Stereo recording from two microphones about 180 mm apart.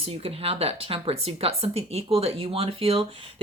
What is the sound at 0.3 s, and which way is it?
Speech, 30° right (ahead or behind).